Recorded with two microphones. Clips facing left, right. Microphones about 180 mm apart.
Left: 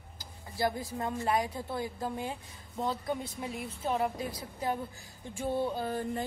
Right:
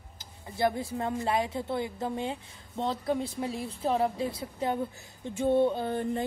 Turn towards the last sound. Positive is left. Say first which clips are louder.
# right 3 dB
turn(degrees=-25)  # may be behind; listen again after turning